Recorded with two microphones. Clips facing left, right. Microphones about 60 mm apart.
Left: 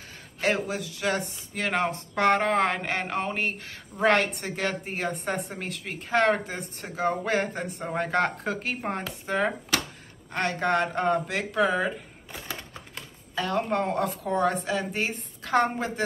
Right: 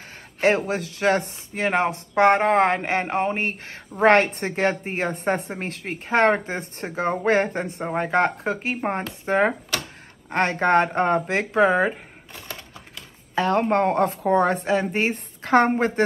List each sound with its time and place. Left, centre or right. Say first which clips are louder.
0.7 s speech: right 7 dB; right
1.5 s a woman's voice: right 5 dB; right
7.8 s speech: right 4 dB; centre
9.2 s a woman's voice: right 7 dB; right
13.3 s a woman's voice: right 7 dB; right